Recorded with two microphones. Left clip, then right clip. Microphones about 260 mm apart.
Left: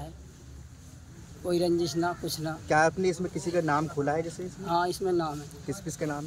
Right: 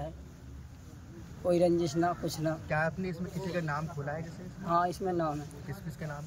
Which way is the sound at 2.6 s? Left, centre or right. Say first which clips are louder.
Left 13 dB; left.